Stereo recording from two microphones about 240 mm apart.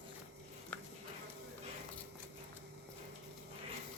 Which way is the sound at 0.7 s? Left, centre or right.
Centre.